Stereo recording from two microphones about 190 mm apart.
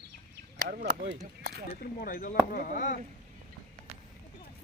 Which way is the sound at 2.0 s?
45° left (ahead or behind).